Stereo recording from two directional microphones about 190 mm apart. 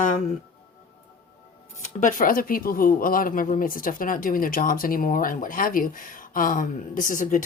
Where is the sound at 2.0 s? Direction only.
45° left (ahead or behind).